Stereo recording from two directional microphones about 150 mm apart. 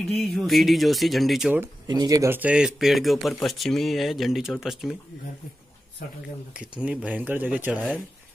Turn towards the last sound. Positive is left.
turn(degrees=-10)  # may be behind; listen again after turning